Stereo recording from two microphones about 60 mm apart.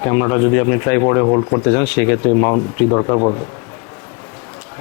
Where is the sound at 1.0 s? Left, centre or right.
Left.